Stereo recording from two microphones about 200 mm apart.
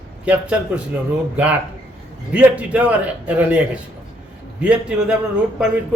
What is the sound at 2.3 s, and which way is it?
A man's voice, 5° right (ahead or behind).